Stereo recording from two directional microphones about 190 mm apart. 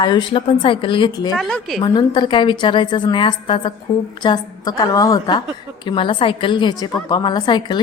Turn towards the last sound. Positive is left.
turn(degrees=25)  # may be behind; listen again after turning